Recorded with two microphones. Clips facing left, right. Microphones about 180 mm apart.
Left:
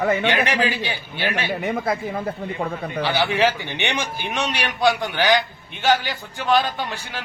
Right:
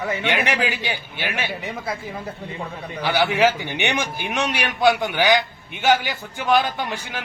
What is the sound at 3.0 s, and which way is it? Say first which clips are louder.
A man's voice: right 2 dB; 10° right (ahead or behind).